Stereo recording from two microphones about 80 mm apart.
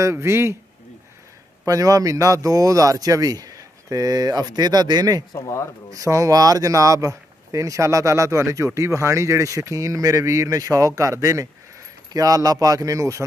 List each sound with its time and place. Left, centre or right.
0.0 s speech: right
1.7 s speech: right
5.3 s speech: left
5.9 s speech: right